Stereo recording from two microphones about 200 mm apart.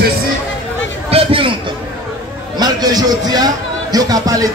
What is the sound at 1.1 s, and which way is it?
Chatter, 25° right (ahead or behind).